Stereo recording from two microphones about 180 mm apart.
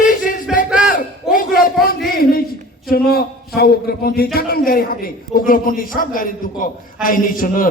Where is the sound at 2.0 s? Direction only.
55° left (ahead or behind).